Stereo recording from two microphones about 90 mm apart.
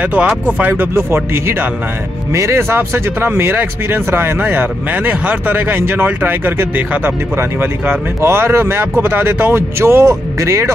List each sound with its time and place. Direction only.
0.0 s speech: 15° right (ahead or behind); by 10.7 s 35° right (ahead or behind)